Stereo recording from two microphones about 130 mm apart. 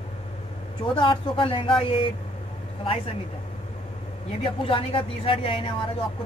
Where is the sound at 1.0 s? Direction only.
40° left (ahead or behind).